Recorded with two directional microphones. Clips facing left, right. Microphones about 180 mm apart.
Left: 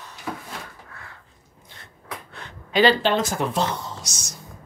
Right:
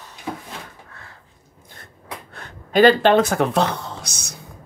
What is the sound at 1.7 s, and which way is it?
Gasp, 45° right (ahead or behind).